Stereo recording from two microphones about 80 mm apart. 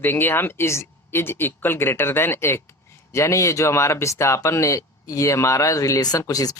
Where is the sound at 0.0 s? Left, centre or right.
Left.